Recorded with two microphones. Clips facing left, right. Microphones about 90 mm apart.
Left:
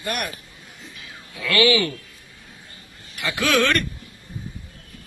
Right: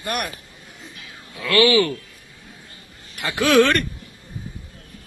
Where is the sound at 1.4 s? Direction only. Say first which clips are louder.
Right 3 dB; 30° right (ahead or behind).